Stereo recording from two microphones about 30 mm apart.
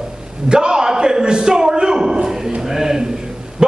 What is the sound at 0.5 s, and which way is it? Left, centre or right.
A man's voice, right.